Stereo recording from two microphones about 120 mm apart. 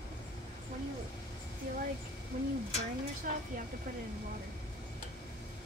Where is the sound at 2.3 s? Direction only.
75° right (ahead or behind).